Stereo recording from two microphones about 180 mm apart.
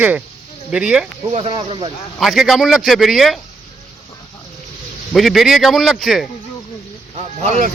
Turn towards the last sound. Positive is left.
turn(degrees=-40)  # may be behind; listen again after turning